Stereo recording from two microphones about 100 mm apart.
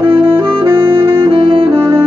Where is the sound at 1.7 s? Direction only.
25° right (ahead or behind).